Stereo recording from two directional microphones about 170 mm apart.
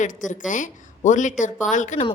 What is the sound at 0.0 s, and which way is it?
A woman's voice, 50° left (ahead or behind).